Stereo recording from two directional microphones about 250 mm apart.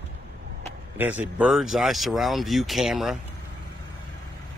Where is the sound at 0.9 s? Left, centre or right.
Centre.